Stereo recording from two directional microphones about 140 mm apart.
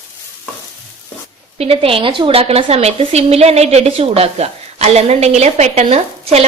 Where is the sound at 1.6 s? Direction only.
45° right (ahead or behind).